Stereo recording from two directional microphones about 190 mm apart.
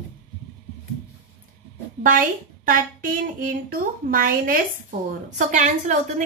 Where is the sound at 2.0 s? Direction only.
45° right (ahead or behind).